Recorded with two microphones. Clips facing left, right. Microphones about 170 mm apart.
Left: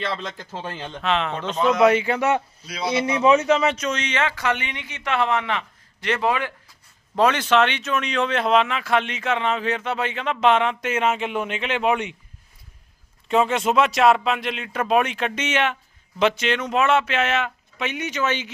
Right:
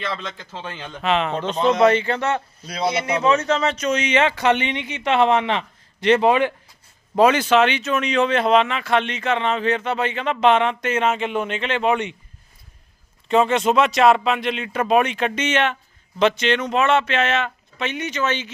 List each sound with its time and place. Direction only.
0.0 s a man's voice: 35° left (ahead or behind)
0.9 s speech: 5° right (ahead or behind)
1.5 s speech: 30° right (ahead or behind)
1.8 s speech: 10° left (ahead or behind)
2.6 s speech: 40° right (ahead or behind)
3.2 s speech: 10° left (ahead or behind)
3.8 s speech: 5° right (ahead or behind)
4.1 s speech: 20° right (ahead or behind)
7.2 s speech: 5° right (ahead or behind)
13.2 s speech: 5° left (ahead or behind)